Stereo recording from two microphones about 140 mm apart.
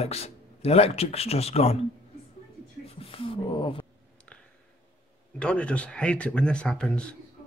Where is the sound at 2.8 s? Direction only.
45° left (ahead or behind).